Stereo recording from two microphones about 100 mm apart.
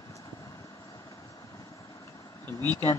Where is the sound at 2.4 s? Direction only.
25° left (ahead or behind).